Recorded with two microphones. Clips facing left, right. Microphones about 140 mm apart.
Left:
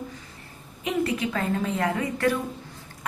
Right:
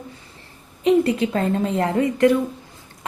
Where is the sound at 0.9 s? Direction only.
30° right (ahead or behind).